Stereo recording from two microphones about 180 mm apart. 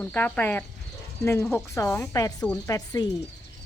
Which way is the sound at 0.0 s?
10° left (ahead or behind).